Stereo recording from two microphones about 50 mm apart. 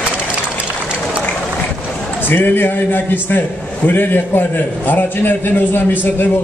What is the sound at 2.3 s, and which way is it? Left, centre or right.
A man's voice, left.